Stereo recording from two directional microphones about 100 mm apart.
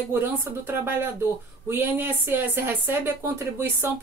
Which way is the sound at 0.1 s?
20° right (ahead or behind).